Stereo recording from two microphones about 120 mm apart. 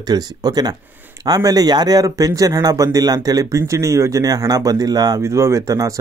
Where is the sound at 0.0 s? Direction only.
35° right (ahead or behind).